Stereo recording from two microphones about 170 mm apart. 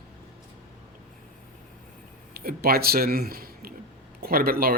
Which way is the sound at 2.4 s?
65° right (ahead or behind).